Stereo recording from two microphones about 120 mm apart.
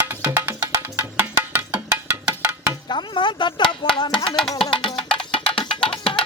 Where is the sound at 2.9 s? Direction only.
40° left (ahead or behind).